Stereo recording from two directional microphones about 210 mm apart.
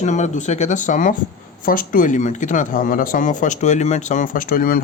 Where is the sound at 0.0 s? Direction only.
35° left (ahead or behind).